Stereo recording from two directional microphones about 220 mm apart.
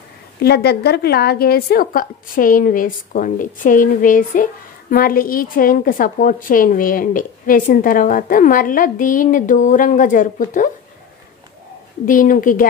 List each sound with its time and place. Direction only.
0.4 s a woman's voice: 45° left (ahead or behind)
12.1 s a woman's voice: 40° left (ahead or behind)